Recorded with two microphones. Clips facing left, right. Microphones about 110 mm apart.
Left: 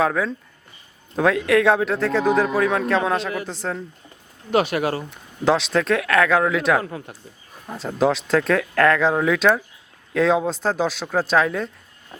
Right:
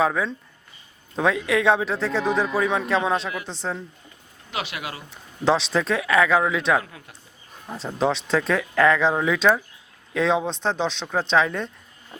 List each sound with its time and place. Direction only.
0.0 s a man's voice: centre (ahead or behind)
4.5 s speech: 45° left (ahead or behind)
5.1 s a man's voice: centre (ahead or behind)
6.8 s speech: 40° left (ahead or behind)
7.7 s a man's voice: centre (ahead or behind)